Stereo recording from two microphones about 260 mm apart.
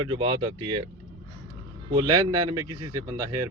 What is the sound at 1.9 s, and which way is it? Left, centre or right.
Speech, centre.